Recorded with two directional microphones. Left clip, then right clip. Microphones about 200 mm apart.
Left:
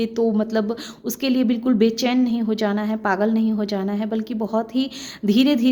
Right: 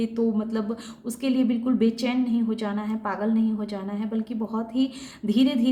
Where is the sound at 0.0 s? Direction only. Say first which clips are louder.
Left 5 dB; 40° left (ahead or behind).